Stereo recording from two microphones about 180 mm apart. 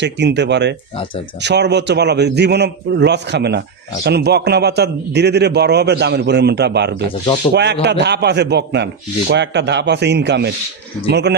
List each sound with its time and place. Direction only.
0.0 s a man's voice: 70° right (ahead or behind)
7.5 s speech: 30° left (ahead or behind)
7.8 s a man's voice: 70° right (ahead or behind)